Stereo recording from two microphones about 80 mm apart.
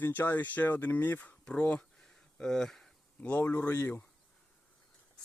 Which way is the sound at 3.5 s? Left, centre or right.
Left.